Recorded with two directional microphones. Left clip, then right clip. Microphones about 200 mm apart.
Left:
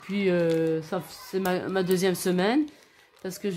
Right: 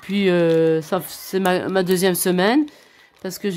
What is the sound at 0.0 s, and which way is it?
Speech, 40° right (ahead or behind).